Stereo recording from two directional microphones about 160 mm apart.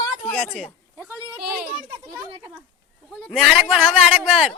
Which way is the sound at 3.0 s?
5° left (ahead or behind).